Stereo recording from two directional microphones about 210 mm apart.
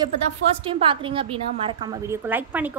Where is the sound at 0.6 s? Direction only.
25° right (ahead or behind).